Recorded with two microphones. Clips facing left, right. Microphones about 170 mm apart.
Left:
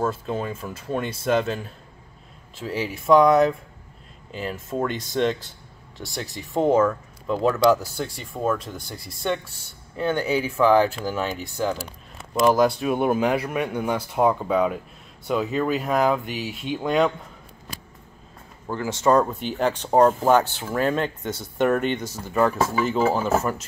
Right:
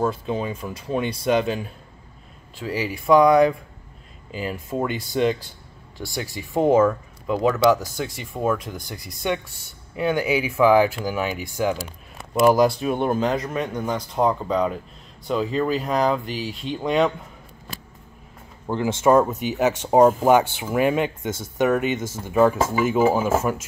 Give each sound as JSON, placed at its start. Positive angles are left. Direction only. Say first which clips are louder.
{"t": 0.1, "sound": "speech", "louder": "right 2 dB", "side_deg": 0}
{"t": 18.7, "sound": "speech", "louder": "right 2 dB", "side_deg": -20}
{"t": 19.4, "sound": "speech", "louder": "right 2 dB", "side_deg": -5}